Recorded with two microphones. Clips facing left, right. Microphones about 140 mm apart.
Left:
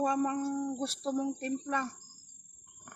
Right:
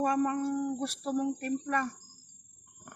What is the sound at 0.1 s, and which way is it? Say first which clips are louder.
Speech: right 2 dB; 20° left (ahead or behind).